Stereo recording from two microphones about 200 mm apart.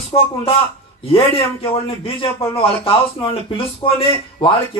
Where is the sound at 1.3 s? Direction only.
30° left (ahead or behind).